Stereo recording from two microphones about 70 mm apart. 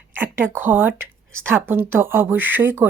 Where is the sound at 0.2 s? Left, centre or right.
Right.